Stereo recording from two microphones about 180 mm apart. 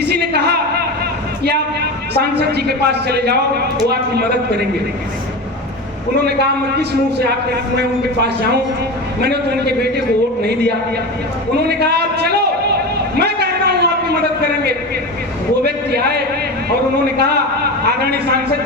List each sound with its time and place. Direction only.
0.0 s a sound: 65° right (ahead or behind)
1.5 s a woman's voice: 65° right (ahead or behind)
6.2 s a man's voice: 65° right (ahead or behind)
11.7 s a man's voice: 65° right (ahead or behind)
13.1 s a sound: 65° right (ahead or behind)
15.6 s a man's voice: 65° right (ahead or behind)